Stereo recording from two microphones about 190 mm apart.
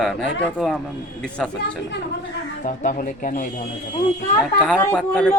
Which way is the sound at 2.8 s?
45° left (ahead or behind).